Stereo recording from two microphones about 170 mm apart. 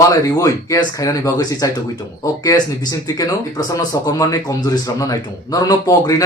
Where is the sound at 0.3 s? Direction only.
20° left (ahead or behind).